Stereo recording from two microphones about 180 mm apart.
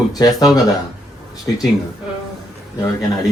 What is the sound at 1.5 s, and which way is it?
Speech, 15° left (ahead or behind).